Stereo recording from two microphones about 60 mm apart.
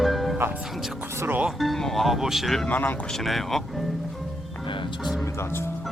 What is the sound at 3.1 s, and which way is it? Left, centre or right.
Speech, centre.